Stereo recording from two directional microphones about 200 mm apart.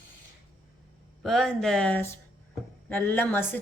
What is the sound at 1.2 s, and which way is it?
Speech, centre (ahead or behind).